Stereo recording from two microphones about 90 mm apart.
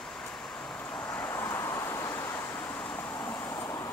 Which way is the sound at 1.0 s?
25° left (ahead or behind).